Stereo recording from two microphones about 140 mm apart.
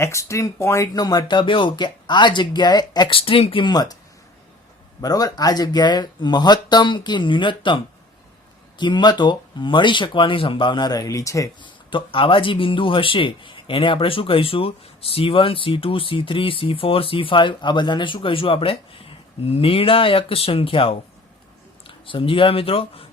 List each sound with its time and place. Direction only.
0.0 s speech: 20° left (ahead or behind)
4.9 s speech: 25° left (ahead or behind)
8.8 s speech: 30° left (ahead or behind)
11.6 s speech: 35° left (ahead or behind)